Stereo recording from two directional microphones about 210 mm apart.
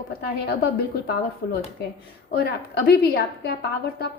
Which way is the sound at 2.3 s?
50° left (ahead or behind).